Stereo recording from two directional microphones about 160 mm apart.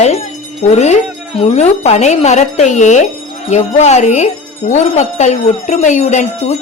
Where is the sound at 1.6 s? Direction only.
45° left (ahead or behind).